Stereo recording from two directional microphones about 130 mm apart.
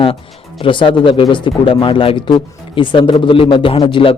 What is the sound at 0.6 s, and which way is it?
A man's voice, 40° left (ahead or behind).